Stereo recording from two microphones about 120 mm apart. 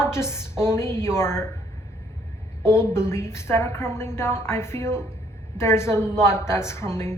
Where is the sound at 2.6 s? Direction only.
20° left (ahead or behind).